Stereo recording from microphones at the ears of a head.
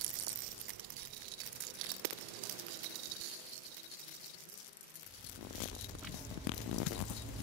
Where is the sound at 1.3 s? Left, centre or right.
Right.